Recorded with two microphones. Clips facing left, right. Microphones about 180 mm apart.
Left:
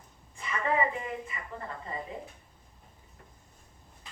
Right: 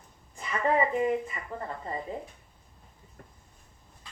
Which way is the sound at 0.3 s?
40° right (ahead or behind).